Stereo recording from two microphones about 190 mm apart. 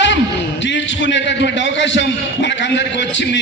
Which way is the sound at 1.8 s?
70° left (ahead or behind).